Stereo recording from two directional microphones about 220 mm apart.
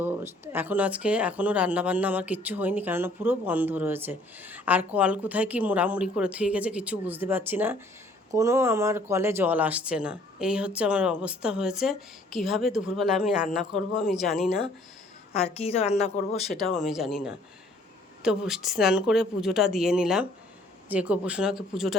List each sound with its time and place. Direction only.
0.0 s speech: 10° right (ahead or behind)
15.5 s speech: 25° left (ahead or behind)
16.5 s speech: centre (ahead or behind)